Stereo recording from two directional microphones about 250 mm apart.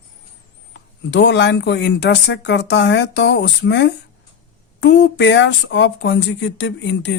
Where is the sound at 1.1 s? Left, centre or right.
Left.